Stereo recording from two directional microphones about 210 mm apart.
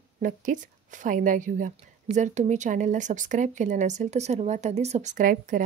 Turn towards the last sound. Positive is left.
turn(degrees=-40)  # may be behind; listen again after turning